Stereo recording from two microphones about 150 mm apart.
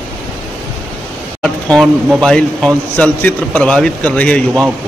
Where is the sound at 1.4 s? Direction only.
5° left (ahead or behind).